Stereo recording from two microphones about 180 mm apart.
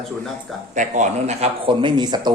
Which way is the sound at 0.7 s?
40° right (ahead or behind).